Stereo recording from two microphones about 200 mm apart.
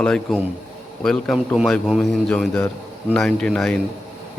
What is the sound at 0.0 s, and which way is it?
A man's voice, 5° left (ahead or behind).